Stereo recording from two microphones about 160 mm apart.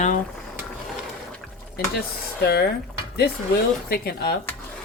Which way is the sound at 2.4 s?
90° left.